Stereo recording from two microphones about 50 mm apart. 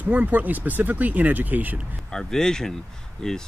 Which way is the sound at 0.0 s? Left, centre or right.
Right.